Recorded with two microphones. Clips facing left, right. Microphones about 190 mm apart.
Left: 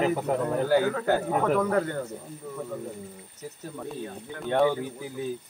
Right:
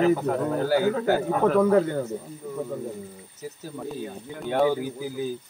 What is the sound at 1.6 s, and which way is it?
Speech, 25° right (ahead or behind).